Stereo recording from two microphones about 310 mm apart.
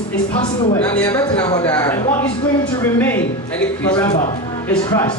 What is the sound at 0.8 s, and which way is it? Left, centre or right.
A man's voice, centre.